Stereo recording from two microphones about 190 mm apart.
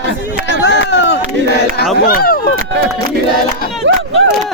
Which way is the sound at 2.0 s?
50° left (ahead or behind).